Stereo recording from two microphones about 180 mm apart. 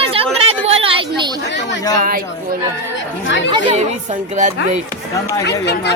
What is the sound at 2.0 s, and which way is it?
Speech, 50° right (ahead or behind).